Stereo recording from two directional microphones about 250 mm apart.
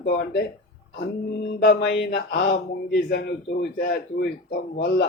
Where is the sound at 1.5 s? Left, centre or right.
Left.